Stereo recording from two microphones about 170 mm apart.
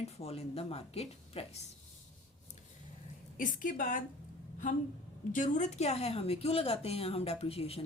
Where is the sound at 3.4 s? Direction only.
50° left (ahead or behind).